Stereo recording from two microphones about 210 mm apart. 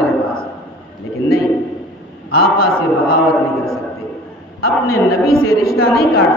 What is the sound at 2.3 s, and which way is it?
Speech, 45° left (ahead or behind).